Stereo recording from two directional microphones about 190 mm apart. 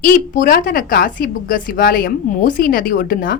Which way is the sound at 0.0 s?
45° left (ahead or behind).